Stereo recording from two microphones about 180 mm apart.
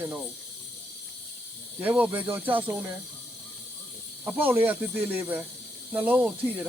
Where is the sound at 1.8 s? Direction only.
10° right (ahead or behind).